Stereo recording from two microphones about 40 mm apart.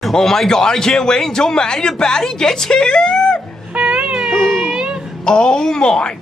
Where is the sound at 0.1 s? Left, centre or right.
Centre.